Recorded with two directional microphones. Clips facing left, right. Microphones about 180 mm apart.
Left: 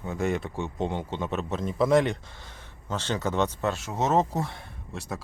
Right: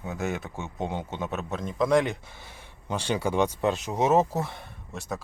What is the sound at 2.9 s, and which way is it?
Speech, 10° right (ahead or behind).